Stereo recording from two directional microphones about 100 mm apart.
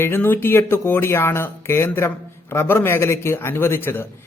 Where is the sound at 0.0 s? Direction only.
20° left (ahead or behind).